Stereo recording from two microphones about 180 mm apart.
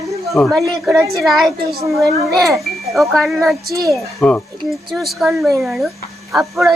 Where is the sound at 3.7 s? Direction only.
20° right (ahead or behind).